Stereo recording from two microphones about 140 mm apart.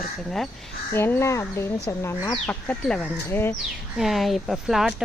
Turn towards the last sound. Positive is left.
turn(degrees=0)  # may be behind; listen again after turning